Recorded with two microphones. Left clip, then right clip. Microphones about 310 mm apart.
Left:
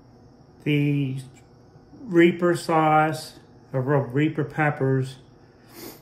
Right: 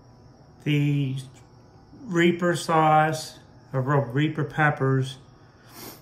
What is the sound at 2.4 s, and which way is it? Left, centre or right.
Speech, right.